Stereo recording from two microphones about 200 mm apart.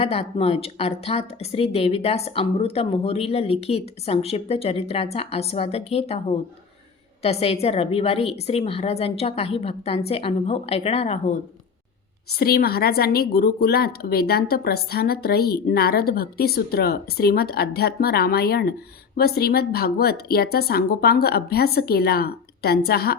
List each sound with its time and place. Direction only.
0.0 s a woman's voice: 30° left (ahead or behind)
12.3 s a woman's voice: 50° left (ahead or behind)